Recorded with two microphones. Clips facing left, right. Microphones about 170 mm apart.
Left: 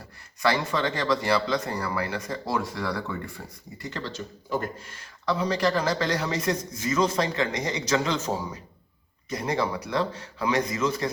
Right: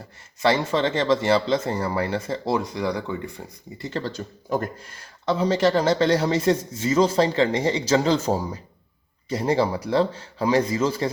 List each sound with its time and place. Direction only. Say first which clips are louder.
0.4 s speech: right 4 dB; 25° right (ahead or behind)
4.0 s speech: right 4 dB; 45° right (ahead or behind)
5.2 s a man's voice: right 5 dB; 25° right (ahead or behind)